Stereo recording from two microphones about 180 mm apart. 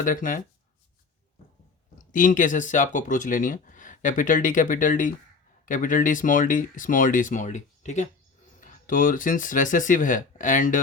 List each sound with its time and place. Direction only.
0.0 s speech: 50° left (ahead or behind)
2.1 s speech: 45° left (ahead or behind)